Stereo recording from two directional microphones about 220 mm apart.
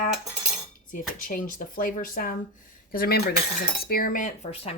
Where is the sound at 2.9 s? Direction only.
45° left (ahead or behind).